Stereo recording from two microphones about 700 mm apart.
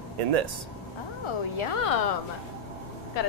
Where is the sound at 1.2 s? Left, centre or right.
Left.